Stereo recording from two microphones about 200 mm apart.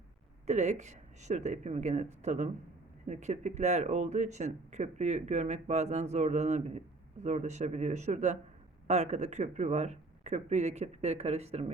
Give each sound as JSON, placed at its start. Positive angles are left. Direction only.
{"t": 0.4, "sound": "speech", "side_deg": -35}